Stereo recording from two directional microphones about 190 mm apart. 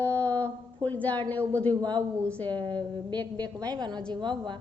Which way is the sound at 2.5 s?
25° right (ahead or behind).